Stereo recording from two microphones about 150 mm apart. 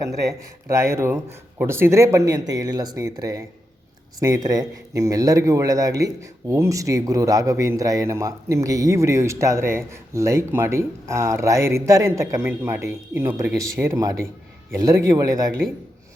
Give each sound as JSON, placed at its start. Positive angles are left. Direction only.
{"t": 0.7, "sound": "a man's voice", "side_deg": -20}